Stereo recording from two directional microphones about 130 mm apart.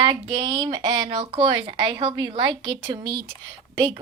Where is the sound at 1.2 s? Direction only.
45° right (ahead or behind).